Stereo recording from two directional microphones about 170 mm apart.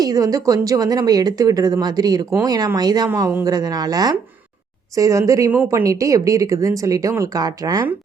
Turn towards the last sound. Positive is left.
turn(degrees=-20)  # may be behind; listen again after turning